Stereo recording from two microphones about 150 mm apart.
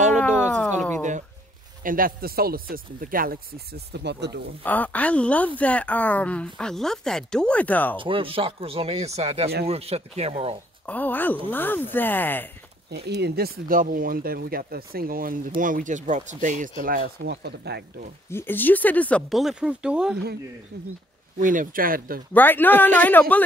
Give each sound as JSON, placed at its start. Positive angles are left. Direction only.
{"t": 0.2, "sound": "a sound", "side_deg": 10}
{"t": 1.8, "sound": "speech", "side_deg": -70}
{"t": 4.6, "sound": "speech", "side_deg": 10}
{"t": 8.0, "sound": "speech", "side_deg": -35}
{"t": 10.9, "sound": "speech", "side_deg": 10}
{"t": 12.9, "sound": "speech", "side_deg": -90}
{"t": 15.6, "sound": "speech", "side_deg": -60}
{"t": 17.2, "sound": "speech", "side_deg": -90}
{"t": 18.3, "sound": "speech", "side_deg": 15}
{"t": 21.4, "sound": "speech", "side_deg": -65}
{"t": 22.3, "sound": "speech", "side_deg": 10}